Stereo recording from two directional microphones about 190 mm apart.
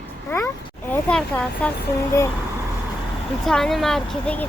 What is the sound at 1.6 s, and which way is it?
Speech, 5° left (ahead or behind).